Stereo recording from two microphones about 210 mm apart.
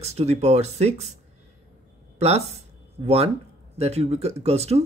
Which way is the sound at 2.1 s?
30° right (ahead or behind).